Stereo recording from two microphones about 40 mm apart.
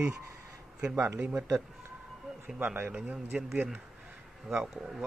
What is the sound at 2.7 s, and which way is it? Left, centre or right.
Speech, right.